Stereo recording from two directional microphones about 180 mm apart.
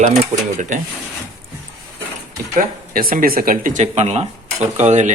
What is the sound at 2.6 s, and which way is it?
Speech, 50° right (ahead or behind).